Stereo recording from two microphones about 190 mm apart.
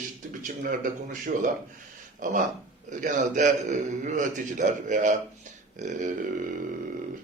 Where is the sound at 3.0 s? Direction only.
40° right (ahead or behind).